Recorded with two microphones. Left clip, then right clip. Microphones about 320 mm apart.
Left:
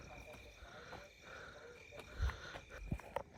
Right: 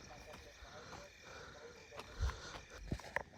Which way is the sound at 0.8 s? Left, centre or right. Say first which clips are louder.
Even; right.